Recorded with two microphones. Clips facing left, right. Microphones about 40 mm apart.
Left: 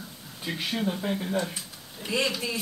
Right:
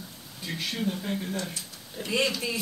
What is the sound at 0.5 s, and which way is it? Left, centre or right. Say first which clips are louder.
Speech: left 2 dB; centre.